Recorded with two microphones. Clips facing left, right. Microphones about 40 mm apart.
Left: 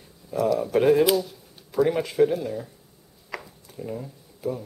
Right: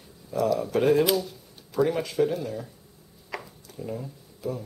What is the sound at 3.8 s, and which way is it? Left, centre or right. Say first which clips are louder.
Speech: left 1 dB; centre.